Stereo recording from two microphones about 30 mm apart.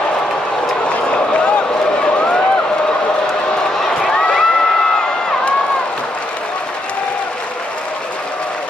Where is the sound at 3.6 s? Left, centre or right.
Left.